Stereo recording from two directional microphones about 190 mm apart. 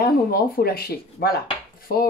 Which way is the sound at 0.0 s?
55° left (ahead or behind).